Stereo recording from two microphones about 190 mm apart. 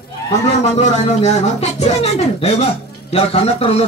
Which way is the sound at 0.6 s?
40° left (ahead or behind).